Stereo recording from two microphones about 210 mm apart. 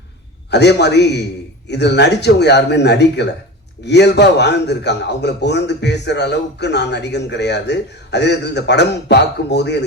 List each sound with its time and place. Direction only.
0.5 s a man's voice: 55° left (ahead or behind)